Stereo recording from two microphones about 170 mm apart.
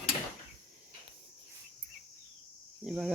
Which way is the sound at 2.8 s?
5° right (ahead or behind).